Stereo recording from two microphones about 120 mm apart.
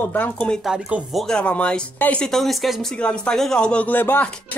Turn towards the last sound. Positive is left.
turn(degrees=15)  # may be behind; listen again after turning